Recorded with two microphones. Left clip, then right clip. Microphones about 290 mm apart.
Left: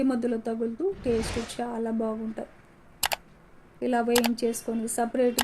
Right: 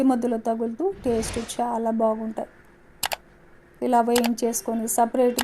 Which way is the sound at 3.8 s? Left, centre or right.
Right.